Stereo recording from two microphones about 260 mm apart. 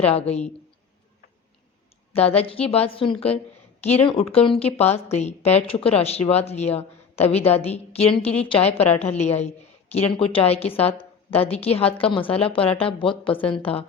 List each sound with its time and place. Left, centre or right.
0.0 s a woman's voice: left
2.1 s a woman's voice: left